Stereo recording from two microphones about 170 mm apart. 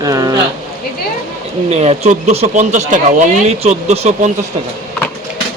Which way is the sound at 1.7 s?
40° right (ahead or behind).